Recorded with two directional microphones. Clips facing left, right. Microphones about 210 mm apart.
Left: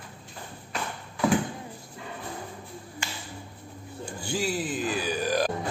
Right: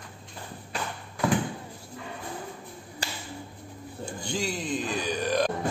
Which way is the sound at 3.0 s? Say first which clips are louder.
Right 3 dB; 35° right (ahead or behind).